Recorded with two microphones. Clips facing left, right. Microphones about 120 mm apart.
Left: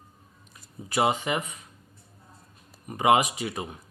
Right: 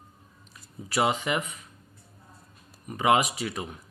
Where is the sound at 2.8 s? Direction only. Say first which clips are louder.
Left 2 dB; 40° left (ahead or behind).